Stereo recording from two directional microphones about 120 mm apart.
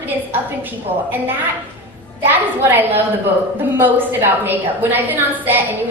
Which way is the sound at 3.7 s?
20° right (ahead or behind).